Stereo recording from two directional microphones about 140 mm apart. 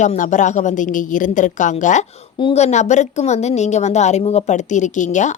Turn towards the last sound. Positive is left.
turn(degrees=60)  # may be behind; listen again after turning